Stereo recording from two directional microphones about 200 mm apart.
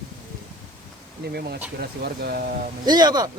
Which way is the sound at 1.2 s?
50° right (ahead or behind).